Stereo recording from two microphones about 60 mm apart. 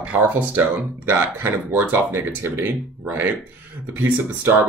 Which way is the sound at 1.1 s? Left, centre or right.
Right.